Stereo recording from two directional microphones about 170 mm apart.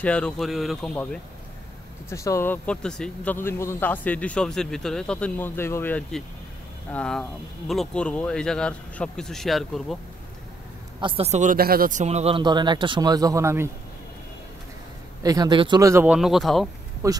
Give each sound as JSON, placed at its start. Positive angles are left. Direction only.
{"t": 0.0, "sound": "speech", "side_deg": 5}
{"t": 2.0, "sound": "speech", "side_deg": 15}
{"t": 11.0, "sound": "a man's voice", "side_deg": -30}
{"t": 11.5, "sound": "a man's voice", "side_deg": -60}
{"t": 15.2, "sound": "speech", "side_deg": -20}
{"t": 17.0, "sound": "a man's voice", "side_deg": -20}